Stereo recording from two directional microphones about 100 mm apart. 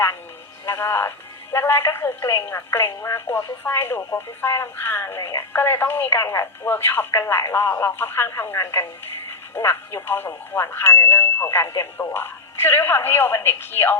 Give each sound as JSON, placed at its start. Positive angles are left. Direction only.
{"t": 0.7, "sound": "speech", "side_deg": 25}